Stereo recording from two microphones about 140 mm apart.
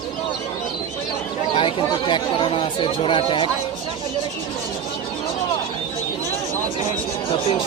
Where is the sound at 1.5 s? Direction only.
35° left (ahead or behind).